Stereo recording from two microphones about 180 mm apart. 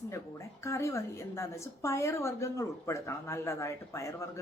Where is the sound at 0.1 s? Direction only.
15° left (ahead or behind).